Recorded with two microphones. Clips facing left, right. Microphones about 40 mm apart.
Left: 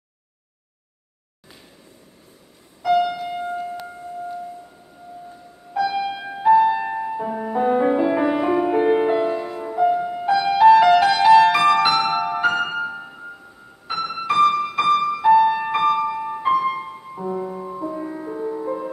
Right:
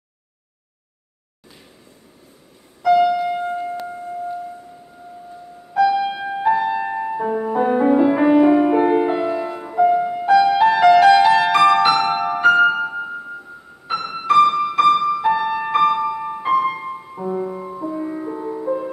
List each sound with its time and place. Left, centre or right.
2.8 s music: centre
6.0 s music: centre
10.2 s music: centre
16.5 s music: centre